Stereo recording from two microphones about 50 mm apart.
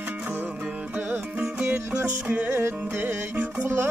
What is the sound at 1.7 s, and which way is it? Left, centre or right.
Music, right.